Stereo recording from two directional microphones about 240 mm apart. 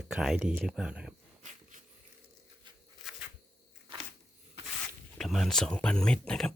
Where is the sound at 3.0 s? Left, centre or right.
Centre.